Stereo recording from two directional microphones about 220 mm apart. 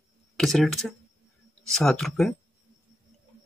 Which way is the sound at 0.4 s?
Centre (ahead or behind).